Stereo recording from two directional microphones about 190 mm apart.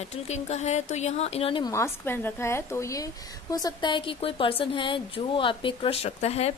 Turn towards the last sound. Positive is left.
turn(degrees=35)  # may be behind; listen again after turning